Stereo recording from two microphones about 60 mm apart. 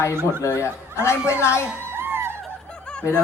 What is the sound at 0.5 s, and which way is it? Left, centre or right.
Speech, left.